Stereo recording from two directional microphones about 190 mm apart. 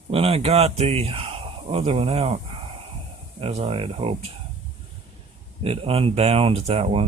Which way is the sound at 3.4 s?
30° right (ahead or behind).